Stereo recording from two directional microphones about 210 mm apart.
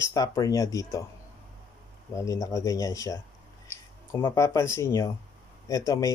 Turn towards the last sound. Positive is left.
turn(degrees=15)  # may be behind; listen again after turning